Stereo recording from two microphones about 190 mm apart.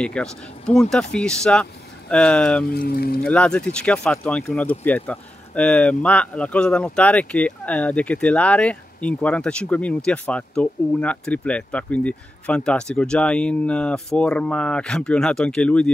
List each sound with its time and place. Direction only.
0.0 s speech: 5° left (ahead or behind)
2.6 s speech: 55° left (ahead or behind)
3.3 s speech: 5° left (ahead or behind)